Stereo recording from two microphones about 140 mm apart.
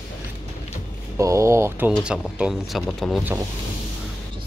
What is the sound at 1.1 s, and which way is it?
Speech, 20° right (ahead or behind).